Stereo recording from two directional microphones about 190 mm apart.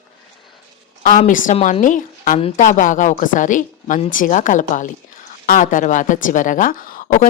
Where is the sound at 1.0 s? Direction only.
45° left (ahead or behind).